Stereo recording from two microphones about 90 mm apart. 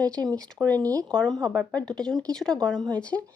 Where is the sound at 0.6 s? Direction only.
45° right (ahead or behind).